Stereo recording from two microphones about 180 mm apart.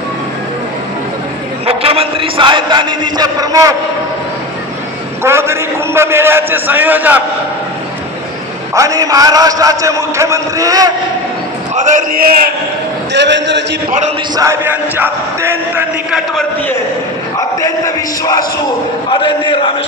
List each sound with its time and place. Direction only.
1.7 s a man's voice: 30° right (ahead or behind)
5.2 s a man's voice: 15° right (ahead or behind)
8.7 s a man's voice: 20° right (ahead or behind)
11.7 s a man's voice: 45° right (ahead or behind)
13.1 s a man's voice: 75° right (ahead or behind)
14.3 s a man's voice: 15° right (ahead or behind)
17.4 s a man's voice: 20° left (ahead or behind)